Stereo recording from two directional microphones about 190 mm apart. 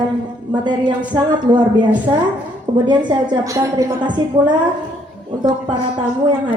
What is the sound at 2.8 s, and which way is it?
A woman's voice, 25° right (ahead or behind).